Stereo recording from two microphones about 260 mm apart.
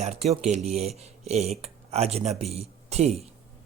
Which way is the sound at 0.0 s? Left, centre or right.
Right.